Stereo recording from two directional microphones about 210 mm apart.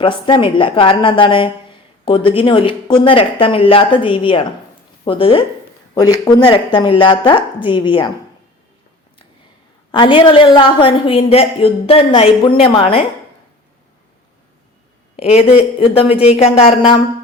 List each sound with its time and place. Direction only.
0.0 s a woman's voice: 25° left (ahead or behind)
9.9 s a woman's voice: 25° left (ahead or behind)
15.1 s a woman's voice: 30° left (ahead or behind)